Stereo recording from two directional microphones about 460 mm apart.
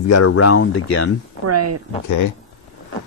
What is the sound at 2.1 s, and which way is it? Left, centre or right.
Speech, left.